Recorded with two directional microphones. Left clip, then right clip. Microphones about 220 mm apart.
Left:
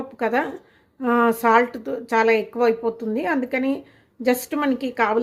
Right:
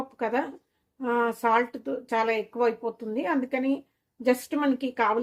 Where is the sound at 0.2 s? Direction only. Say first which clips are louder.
Left 6 dB; 30° left (ahead or behind).